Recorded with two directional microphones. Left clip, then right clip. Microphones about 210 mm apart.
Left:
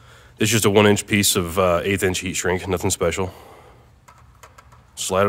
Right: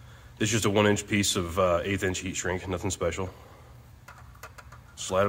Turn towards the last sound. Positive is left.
turn(degrees=45)  # may be behind; listen again after turning